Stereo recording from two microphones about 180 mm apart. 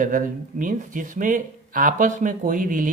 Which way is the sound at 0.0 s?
50° right (ahead or behind).